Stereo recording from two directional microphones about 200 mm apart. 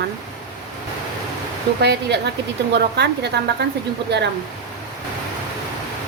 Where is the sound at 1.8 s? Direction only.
55° right (ahead or behind).